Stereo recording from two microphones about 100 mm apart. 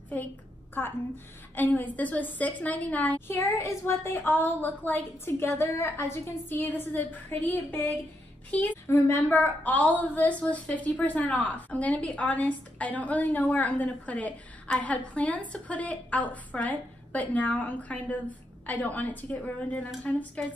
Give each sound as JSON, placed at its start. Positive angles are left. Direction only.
{"t": 0.8, "sound": "a woman's voice", "side_deg": 20}
{"t": 8.8, "sound": "a woman's voice", "side_deg": 25}